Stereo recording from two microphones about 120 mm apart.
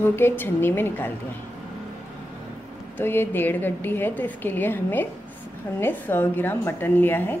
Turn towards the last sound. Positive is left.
turn(degrees=15)  # may be behind; listen again after turning